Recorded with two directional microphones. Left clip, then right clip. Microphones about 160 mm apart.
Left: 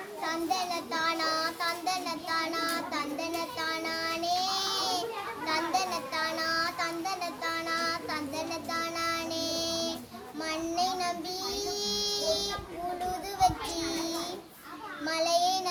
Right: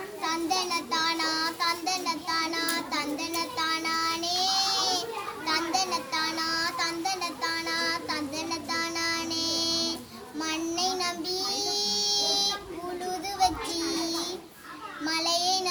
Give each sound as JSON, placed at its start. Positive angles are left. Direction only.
{"t": 0.2, "sound": "child singing", "side_deg": 20}
{"t": 13.4, "sound": "a sound", "side_deg": 20}
{"t": 15.0, "sound": "a child's voice", "side_deg": 20}